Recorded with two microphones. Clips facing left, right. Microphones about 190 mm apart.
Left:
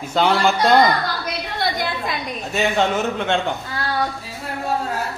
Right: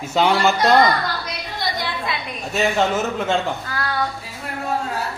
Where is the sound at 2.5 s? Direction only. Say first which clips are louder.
Even; centre (ahead or behind).